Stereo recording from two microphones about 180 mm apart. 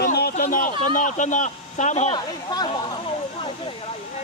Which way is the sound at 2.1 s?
25° left (ahead or behind).